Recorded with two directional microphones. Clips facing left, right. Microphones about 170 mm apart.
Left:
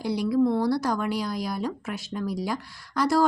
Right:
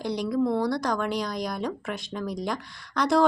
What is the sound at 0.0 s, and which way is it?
Speech, 10° left (ahead or behind).